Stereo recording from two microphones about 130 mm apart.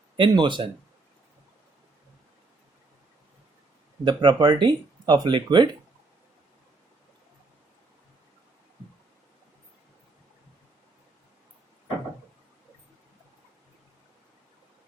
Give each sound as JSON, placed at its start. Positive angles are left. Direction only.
{"t": 0.2, "sound": "speech", "side_deg": -40}
{"t": 4.0, "sound": "speech", "side_deg": -40}